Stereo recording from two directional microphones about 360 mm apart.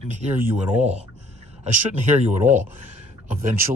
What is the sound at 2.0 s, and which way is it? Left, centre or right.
Speech, centre.